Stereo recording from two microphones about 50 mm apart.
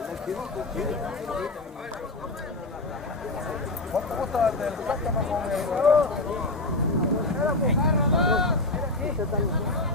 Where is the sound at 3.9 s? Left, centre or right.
Centre.